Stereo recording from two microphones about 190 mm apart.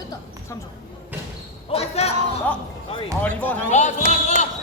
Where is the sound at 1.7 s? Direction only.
35° left (ahead or behind).